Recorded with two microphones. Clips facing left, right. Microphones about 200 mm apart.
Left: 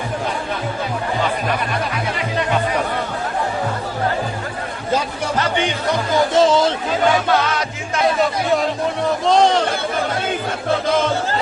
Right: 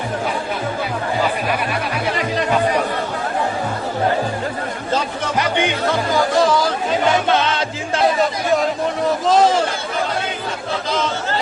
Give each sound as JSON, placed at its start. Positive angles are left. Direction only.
{"t": 5.9, "sound": "music", "side_deg": 20}
{"t": 7.3, "sound": "music", "side_deg": -25}
{"t": 9.0, "sound": "a sound", "side_deg": 0}
{"t": 10.8, "sound": "chatter", "side_deg": 55}